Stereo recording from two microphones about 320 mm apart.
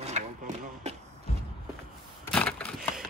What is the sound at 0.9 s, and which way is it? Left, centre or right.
Music, right.